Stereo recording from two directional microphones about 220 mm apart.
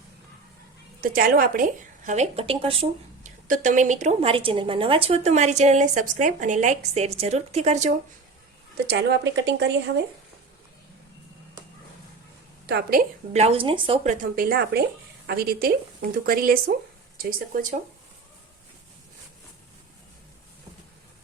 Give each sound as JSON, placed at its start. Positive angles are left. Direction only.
{"t": 1.0, "sound": "speech", "side_deg": -40}
{"t": 3.2, "sound": "speech", "side_deg": -35}
{"t": 8.9, "sound": "a woman's voice", "side_deg": -50}
{"t": 12.6, "sound": "a woman's voice", "side_deg": -45}